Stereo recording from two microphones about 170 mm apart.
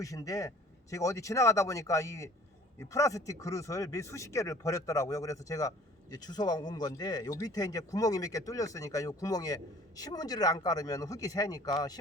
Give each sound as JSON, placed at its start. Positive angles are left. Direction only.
{"t": 0.0, "sound": "speech", "side_deg": 20}